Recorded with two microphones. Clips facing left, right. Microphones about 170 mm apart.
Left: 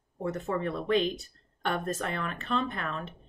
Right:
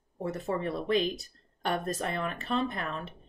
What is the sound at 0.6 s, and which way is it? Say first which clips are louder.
Speech: left 1 dB; 35° right (ahead or behind).